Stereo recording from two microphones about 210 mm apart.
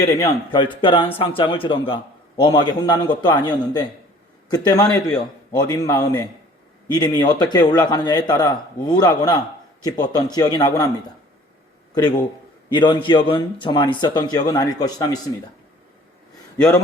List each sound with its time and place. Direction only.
0.0 s a man's voice: 15° left (ahead or behind)
12.7 s a man's voice: 20° left (ahead or behind)